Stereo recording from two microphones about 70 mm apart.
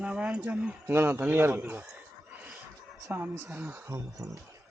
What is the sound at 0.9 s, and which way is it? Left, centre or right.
Speech, right.